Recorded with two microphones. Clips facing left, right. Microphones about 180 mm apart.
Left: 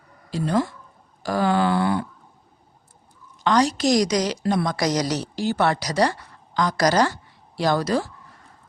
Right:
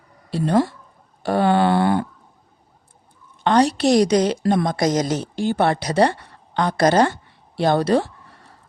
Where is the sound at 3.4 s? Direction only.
60° right (ahead or behind).